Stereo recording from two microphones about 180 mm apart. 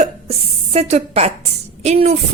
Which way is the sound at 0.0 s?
35° right (ahead or behind).